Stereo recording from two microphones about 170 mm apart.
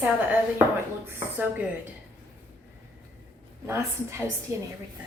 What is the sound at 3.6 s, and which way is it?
Speech, 15° right (ahead or behind).